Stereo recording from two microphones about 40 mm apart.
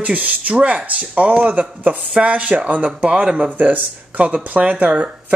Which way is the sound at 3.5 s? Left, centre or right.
Right.